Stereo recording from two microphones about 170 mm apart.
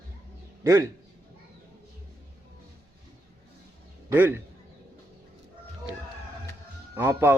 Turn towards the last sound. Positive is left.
turn(degrees=-10)  # may be behind; listen again after turning